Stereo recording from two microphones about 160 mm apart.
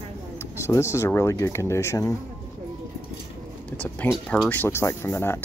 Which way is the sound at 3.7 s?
10° left (ahead or behind).